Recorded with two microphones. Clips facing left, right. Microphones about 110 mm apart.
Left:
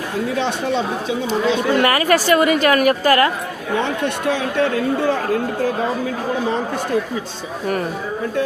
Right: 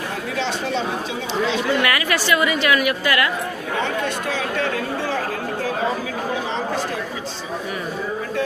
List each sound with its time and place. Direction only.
1.3 s a woman's voice: 40° left (ahead or behind)